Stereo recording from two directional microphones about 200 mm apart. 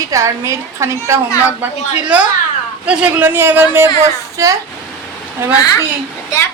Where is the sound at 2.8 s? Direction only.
10° right (ahead or behind).